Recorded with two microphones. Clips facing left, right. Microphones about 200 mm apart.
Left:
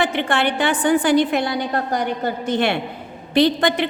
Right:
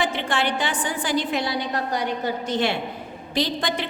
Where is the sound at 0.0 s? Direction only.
60° left (ahead or behind).